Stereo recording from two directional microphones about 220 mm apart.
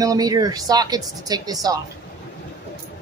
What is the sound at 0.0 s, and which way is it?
Speech, 15° right (ahead or behind).